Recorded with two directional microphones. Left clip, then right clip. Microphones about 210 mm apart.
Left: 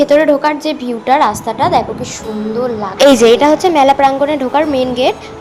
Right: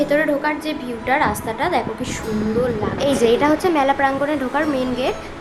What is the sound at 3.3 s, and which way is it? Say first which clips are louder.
A woman's voice: left 7 dB; 25° left (ahead or behind).